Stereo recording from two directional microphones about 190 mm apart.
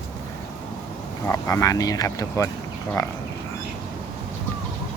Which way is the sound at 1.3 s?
15° left (ahead or behind).